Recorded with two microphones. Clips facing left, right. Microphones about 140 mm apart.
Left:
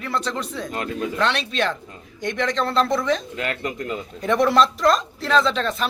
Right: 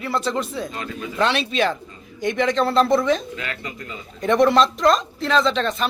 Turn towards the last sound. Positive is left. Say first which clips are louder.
# right 1 dB
turn(degrees=0)  # may be behind; listen again after turning